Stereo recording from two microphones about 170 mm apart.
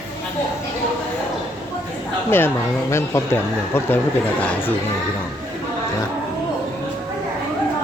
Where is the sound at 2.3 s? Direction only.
15° left (ahead or behind).